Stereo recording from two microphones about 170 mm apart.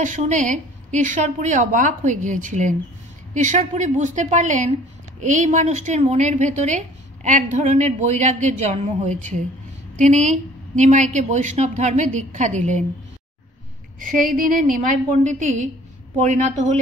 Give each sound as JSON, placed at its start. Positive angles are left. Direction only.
{"t": 0.0, "sound": "a woman's voice", "side_deg": -45}
{"t": 14.2, "sound": "a woman's voice", "side_deg": -50}